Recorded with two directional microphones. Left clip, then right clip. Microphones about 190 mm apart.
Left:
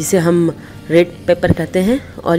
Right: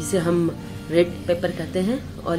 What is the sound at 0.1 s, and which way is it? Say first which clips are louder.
A woman's voice: left 8 dB; 45° left (ahead or behind).